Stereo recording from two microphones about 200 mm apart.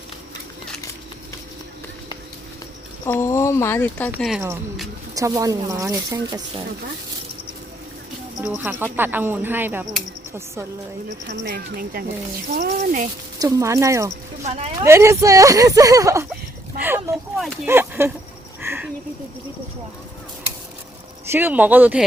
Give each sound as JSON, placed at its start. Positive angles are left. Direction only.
{"t": 3.1, "sound": "speech", "side_deg": 15}
{"t": 4.2, "sound": "speech", "side_deg": 0}
{"t": 5.1, "sound": "speech", "side_deg": -15}
{"t": 8.4, "sound": "speech", "side_deg": -10}
{"t": 11.4, "sound": "speech", "side_deg": -55}
{"t": 12.7, "sound": "speech", "side_deg": -40}
{"t": 13.4, "sound": "speech", "side_deg": -15}
{"t": 14.4, "sound": "speech", "side_deg": -30}
{"t": 14.8, "sound": "speech", "side_deg": -15}
{"t": 18.6, "sound": "a sound", "side_deg": -10}
{"t": 21.2, "sound": "speech", "side_deg": -10}